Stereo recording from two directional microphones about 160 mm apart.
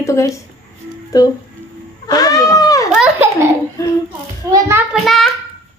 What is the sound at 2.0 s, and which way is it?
Speech, 20° left (ahead or behind).